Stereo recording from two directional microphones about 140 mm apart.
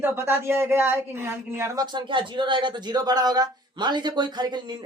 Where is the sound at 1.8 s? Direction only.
35° right (ahead or behind).